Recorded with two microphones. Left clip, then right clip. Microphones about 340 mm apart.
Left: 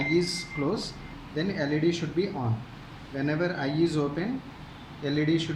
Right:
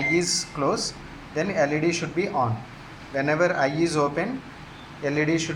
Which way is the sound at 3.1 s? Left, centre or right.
Centre.